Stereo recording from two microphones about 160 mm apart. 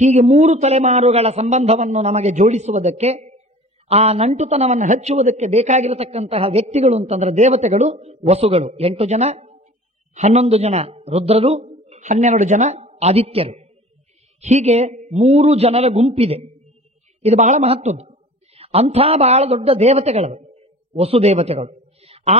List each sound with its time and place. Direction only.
0.0 s a man's voice: 45° right (ahead or behind)